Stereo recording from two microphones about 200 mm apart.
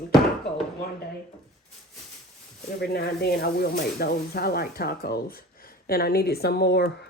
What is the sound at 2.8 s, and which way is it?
Speech, 55° left (ahead or behind).